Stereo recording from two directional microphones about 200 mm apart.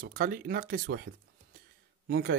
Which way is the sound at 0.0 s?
45° right (ahead or behind).